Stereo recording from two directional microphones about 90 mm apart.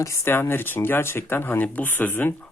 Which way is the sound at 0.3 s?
25° left (ahead or behind).